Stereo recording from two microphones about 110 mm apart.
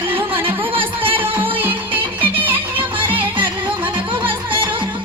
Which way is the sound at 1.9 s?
15° right (ahead or behind).